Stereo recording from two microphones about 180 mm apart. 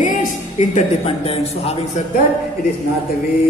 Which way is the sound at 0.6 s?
35° left (ahead or behind).